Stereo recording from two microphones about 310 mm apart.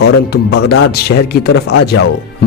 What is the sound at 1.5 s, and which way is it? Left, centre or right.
Speech, left.